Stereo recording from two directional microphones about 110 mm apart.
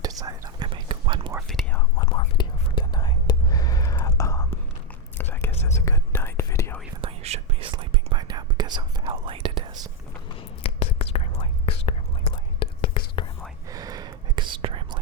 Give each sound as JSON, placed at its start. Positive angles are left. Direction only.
{"t": 0.0, "sound": "whispering", "side_deg": -35}
{"t": 0.7, "sound": "whispering", "side_deg": -50}
{"t": 2.0, "sound": "whispering", "side_deg": 40}
{"t": 7.2, "sound": "whispering", "side_deg": -70}
{"t": 7.7, "sound": "whispering", "side_deg": -50}
{"t": 10.6, "sound": "whispering", "side_deg": 65}
{"t": 12.5, "sound": "whispering", "side_deg": 50}
{"t": 13.7, "sound": "whispering", "side_deg": -35}